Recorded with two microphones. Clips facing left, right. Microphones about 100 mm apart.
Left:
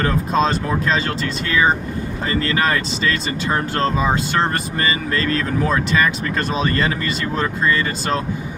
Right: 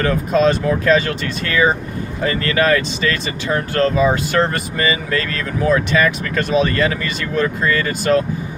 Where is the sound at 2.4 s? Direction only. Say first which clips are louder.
Right 5 dB; 30° left (ahead or behind).